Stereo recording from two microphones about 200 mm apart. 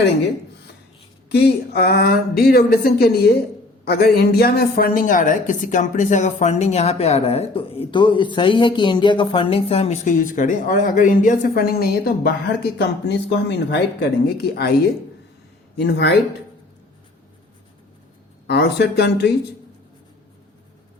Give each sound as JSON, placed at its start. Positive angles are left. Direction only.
{"t": 1.3, "sound": "a woman's voice", "side_deg": 55}
{"t": 18.4, "sound": "speech", "side_deg": 55}